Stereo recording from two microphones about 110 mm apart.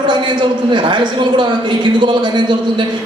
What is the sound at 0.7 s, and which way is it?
A man's voice, 45° right (ahead or behind).